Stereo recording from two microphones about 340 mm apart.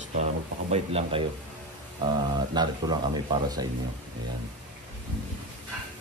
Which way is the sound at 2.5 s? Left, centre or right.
Centre.